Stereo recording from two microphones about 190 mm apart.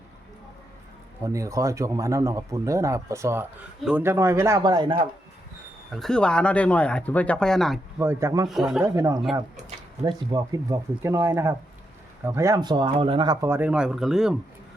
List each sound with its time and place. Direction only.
1.2 s speech: 15° right (ahead or behind)
5.9 s speech: centre (ahead or behind)
7.9 s speech: 15° right (ahead or behind)
8.4 s speech: centre (ahead or behind)
8.8 s speech: 15° right (ahead or behind); by 14.3 s centre (ahead or behind)